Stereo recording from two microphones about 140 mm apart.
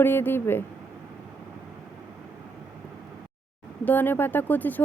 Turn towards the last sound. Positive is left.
turn(degrees=10)  # may be behind; listen again after turning